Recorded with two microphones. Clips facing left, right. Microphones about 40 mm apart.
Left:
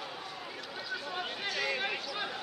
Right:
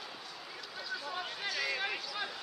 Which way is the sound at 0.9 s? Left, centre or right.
Centre.